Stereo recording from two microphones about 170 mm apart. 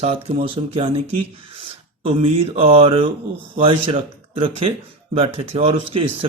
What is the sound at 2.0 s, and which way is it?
Speech, 35° right (ahead or behind).